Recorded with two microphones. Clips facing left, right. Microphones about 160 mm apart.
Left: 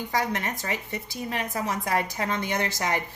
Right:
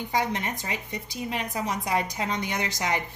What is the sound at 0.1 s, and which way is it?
A woman's voice, 20° right (ahead or behind).